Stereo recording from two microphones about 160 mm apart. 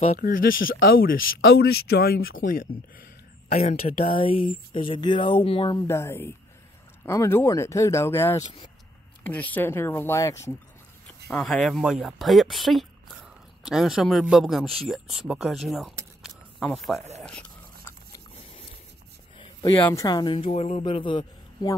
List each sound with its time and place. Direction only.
0.1 s speech: 60° left (ahead or behind)
1.6 s speech: 80° left; by 3.5 s 60° left (ahead or behind)
3.8 s speech: 40° left (ahead or behind)
5.9 s speech: 15° left (ahead or behind)
11.2 s speech: 5° left (ahead or behind)
15.7 s a sound: centre (ahead or behind)
17.2 s speech: 5° left (ahead or behind)
19.3 s a sound: 30° left (ahead or behind)
19.9 s a woman's voice: 20° left (ahead or behind)